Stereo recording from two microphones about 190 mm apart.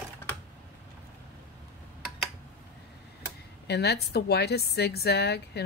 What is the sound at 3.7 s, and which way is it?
Speech, 60° left (ahead or behind).